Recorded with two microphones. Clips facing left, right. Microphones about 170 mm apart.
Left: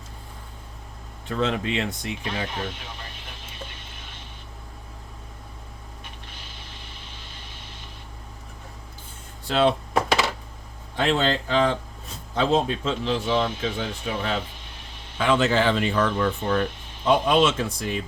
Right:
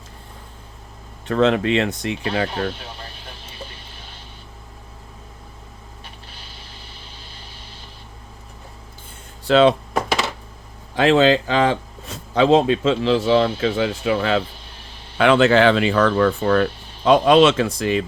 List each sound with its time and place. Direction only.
1.3 s speech: 75° right (ahead or behind)
9.4 s speech: 90° right
10.9 s speech: 90° right
15.2 s speech: 75° right (ahead or behind); by 18.0 s 90° right